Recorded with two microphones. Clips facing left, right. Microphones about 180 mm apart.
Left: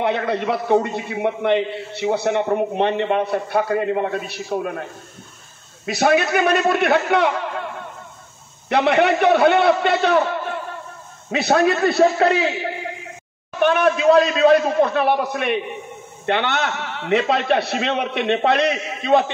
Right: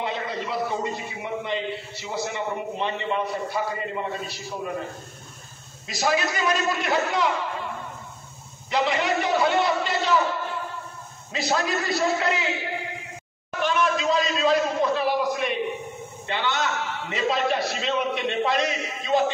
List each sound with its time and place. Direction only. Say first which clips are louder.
0.0 s a man's voice: left 8 dB; 65° left (ahead or behind)
5.9 s a man's voice: left 7 dB; 65° left (ahead or behind)
8.6 s a man's voice: left 7 dB; 60° left (ahead or behind)
13.6 s a man's voice: left 7 dB; 60° left (ahead or behind)